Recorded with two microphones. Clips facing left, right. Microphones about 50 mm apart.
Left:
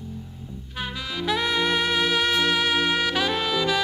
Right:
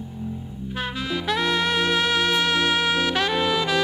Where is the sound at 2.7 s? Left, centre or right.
Centre.